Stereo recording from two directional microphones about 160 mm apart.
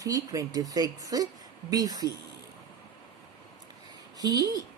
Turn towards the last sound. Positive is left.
turn(degrees=-20)  # may be behind; listen again after turning